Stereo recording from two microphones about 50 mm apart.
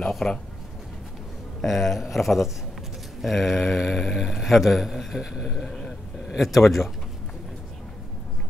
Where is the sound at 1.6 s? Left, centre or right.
Centre.